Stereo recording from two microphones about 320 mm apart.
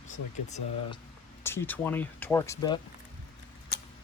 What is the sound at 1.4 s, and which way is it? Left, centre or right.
Speech, centre.